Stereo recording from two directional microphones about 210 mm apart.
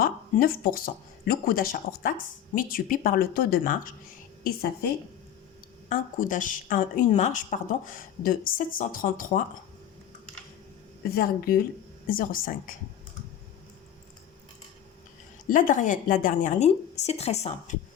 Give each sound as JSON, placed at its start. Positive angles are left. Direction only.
{"t": 0.0, "sound": "speech", "side_deg": 45}
{"t": 5.9, "sound": "speech", "side_deg": 40}
{"t": 11.1, "sound": "speech", "side_deg": 45}
{"t": 15.4, "sound": "speech", "side_deg": 40}